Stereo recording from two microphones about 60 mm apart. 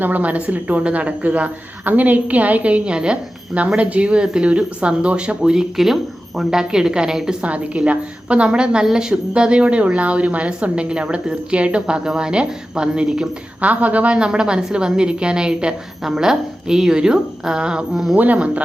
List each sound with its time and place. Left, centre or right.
0.0 s a woman's voice: right; by 7.3 s centre
7.4 s a woman's voice: right
13.6 s a woman's voice: right; by 18.1 s centre
18.2 s a woman's voice: right